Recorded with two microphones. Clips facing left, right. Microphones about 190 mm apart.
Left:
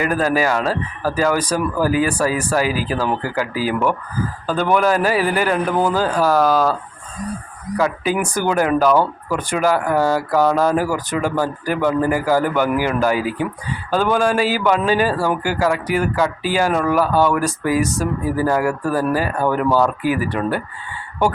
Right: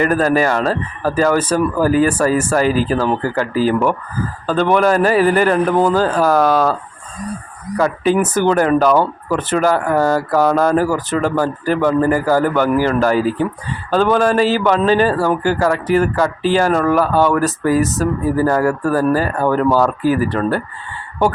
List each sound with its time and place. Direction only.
0.0 s a man's voice: 5° left (ahead or behind)
7.8 s a man's voice: 5° left (ahead or behind)